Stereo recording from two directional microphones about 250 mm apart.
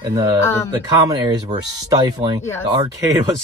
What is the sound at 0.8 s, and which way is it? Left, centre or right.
Speech, centre.